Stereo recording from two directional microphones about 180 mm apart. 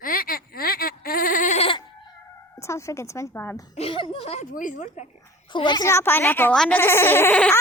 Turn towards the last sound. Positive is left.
turn(degrees=10)  # may be behind; listen again after turning